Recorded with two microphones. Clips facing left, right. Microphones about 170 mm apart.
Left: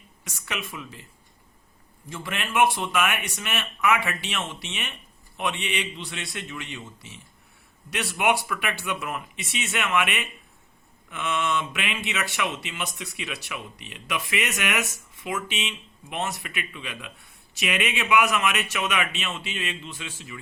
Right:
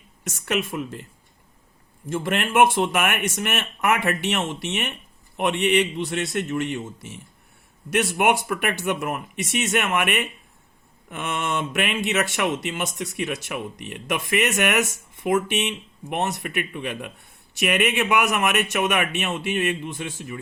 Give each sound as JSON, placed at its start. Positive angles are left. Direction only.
{"t": 0.3, "sound": "speech", "side_deg": -50}
{"t": 2.0, "sound": "a man's voice", "side_deg": -50}